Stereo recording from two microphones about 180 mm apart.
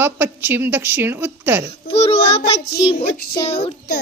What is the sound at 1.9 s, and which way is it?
Child singing, 35° left (ahead or behind).